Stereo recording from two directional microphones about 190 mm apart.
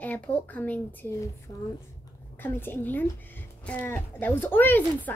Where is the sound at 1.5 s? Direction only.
20° left (ahead or behind).